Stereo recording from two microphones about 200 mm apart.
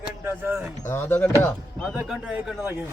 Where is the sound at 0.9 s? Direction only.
10° left (ahead or behind).